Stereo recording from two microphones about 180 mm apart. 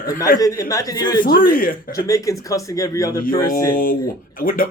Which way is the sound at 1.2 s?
50° left (ahead or behind).